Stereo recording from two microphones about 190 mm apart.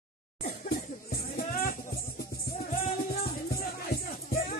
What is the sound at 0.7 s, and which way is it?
Music, 60° left (ahead or behind).